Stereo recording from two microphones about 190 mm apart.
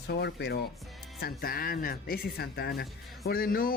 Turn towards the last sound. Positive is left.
turn(degrees=50)  # may be behind; listen again after turning